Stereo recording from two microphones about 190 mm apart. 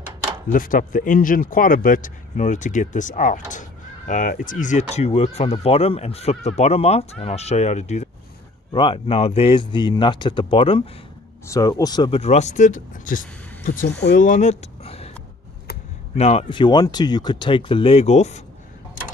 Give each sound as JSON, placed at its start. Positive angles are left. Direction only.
{"t": 0.5, "sound": "speech", "side_deg": 45}
{"t": 8.7, "sound": "speech", "side_deg": 25}
{"t": 11.4, "sound": "speech", "side_deg": 15}
{"t": 16.2, "sound": "speech", "side_deg": 30}